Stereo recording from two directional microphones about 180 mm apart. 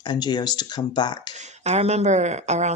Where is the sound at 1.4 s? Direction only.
40° right (ahead or behind).